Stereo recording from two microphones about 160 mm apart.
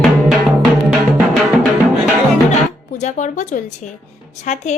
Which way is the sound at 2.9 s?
50° left (ahead or behind).